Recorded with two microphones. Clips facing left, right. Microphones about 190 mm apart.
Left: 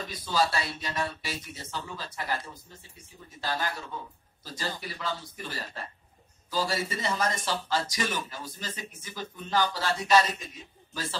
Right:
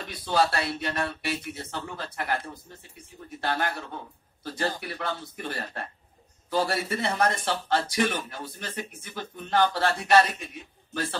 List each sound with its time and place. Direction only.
0.0 s speech: 60° right (ahead or behind)